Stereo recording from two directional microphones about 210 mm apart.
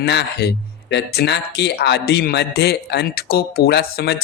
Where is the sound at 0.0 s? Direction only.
55° left (ahead or behind).